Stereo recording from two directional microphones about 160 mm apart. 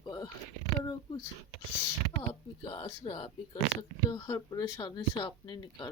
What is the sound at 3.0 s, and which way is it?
Speech, 30° left (ahead or behind).